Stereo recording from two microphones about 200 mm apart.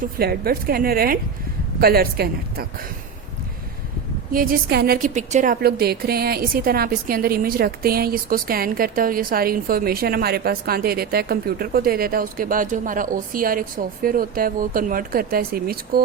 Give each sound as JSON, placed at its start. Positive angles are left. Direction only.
{"t": 0.0, "sound": "a woman's voice", "side_deg": -50}
{"t": 4.3, "sound": "a woman's voice", "side_deg": -45}